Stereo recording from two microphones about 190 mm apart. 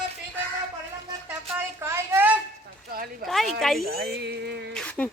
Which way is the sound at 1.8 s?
15° right (ahead or behind).